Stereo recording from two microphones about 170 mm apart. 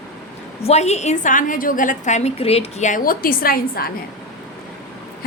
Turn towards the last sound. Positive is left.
turn(degrees=60)  # may be behind; listen again after turning